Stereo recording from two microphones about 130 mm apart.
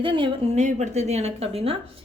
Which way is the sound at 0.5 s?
65° right (ahead or behind).